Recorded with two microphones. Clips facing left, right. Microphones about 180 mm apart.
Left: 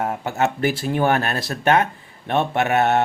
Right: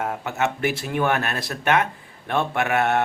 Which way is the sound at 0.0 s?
35° left (ahead or behind).